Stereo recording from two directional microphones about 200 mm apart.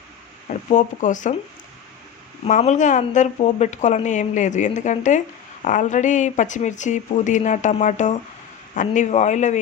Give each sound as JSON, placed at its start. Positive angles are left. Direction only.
{"t": 0.4, "sound": "speech", "side_deg": 40}
{"t": 2.5, "sound": "a woman's voice", "side_deg": 35}